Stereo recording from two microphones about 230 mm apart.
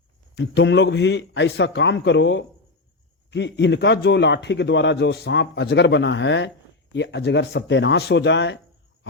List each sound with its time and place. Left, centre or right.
0.3 s a man's voice: left